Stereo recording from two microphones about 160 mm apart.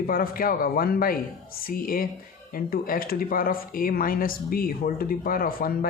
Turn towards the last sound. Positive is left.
turn(degrees=65)  # may be behind; listen again after turning